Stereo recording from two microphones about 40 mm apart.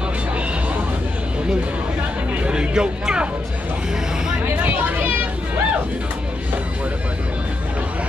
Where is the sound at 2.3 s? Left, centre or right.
Right.